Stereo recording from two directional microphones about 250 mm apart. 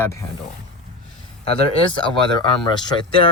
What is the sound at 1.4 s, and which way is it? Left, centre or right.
Speech, left.